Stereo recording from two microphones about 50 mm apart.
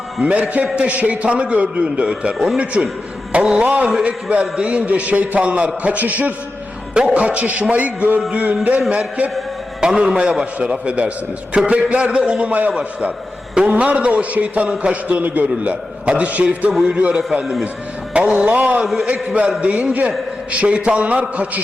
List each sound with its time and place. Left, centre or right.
0.2 s a man's voice: right
3.3 s music: centre
3.6 s a man's voice: right
8.3 s a sound: right
9.8 s a man's voice: centre
12.5 s a sound: right
12.7 s a man's voice: right